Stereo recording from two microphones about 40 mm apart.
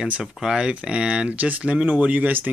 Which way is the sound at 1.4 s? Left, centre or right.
Right.